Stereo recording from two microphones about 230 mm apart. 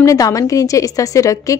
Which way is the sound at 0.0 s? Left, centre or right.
Centre.